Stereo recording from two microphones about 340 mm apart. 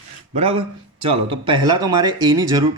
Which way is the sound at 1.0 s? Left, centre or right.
Centre.